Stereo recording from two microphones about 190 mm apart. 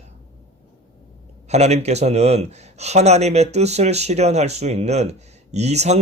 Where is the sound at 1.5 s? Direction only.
35° right (ahead or behind).